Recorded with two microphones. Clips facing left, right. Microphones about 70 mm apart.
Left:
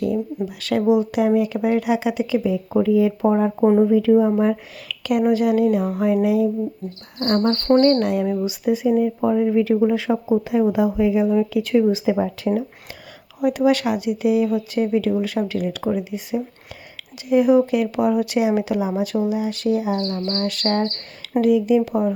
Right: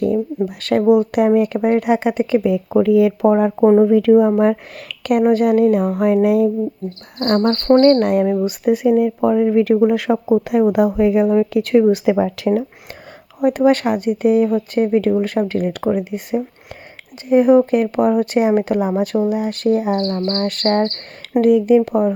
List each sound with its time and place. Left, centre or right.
0.4 s speech: right
3.8 s speech: right
13.4 s speech: right